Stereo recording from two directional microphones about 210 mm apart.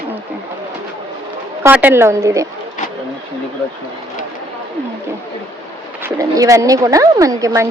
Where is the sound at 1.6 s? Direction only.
10° right (ahead or behind).